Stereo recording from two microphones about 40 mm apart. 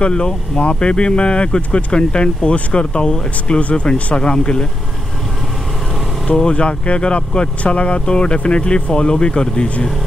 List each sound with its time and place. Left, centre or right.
0.0 s speech: left
6.2 s speech: left